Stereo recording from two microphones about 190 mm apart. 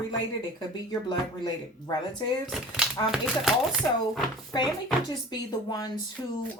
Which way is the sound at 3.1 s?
Centre (ahead or behind).